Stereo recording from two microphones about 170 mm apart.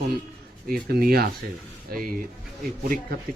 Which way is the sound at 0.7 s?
60° right (ahead or behind).